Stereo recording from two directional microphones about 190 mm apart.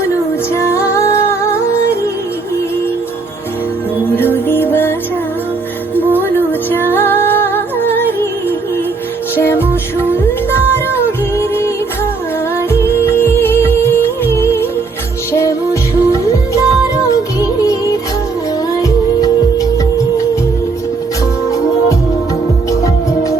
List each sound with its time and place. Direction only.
0.5 s music: 15° left (ahead or behind)
4.0 s music: 10° left (ahead or behind)
6.1 s music: 10° left (ahead or behind)
12.7 s music: 15° left (ahead or behind)